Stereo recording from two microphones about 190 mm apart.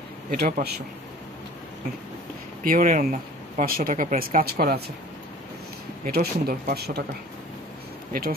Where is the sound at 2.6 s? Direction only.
45° right (ahead or behind).